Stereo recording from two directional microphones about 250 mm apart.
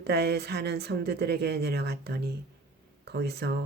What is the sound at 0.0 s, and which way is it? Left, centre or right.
Speech, right.